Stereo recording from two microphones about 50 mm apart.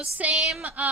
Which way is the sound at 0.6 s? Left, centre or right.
Right.